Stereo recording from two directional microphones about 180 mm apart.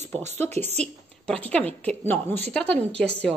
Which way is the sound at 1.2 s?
5° left (ahead or behind).